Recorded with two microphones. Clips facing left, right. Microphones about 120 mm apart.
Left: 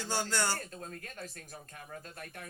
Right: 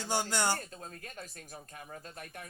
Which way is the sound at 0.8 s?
30° right (ahead or behind).